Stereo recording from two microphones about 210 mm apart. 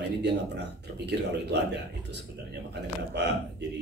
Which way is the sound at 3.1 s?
55° right (ahead or behind).